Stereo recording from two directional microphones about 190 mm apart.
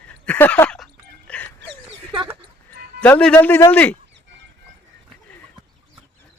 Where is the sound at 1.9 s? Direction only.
30° right (ahead or behind).